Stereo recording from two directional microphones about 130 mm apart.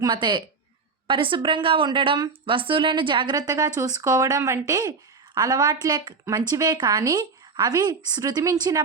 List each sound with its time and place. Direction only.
0.0 s a woman's voice: 35° right (ahead or behind)